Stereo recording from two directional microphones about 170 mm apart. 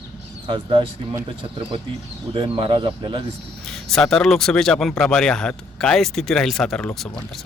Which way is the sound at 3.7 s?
Centre (ahead or behind).